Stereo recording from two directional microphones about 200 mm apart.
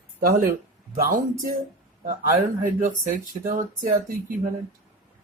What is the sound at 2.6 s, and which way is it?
Speech, 40° right (ahead or behind).